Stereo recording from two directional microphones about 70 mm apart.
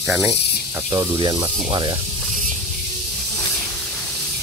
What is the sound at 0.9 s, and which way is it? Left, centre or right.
Speech, right.